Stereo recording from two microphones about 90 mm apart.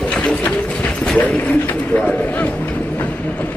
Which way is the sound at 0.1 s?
10° left (ahead or behind).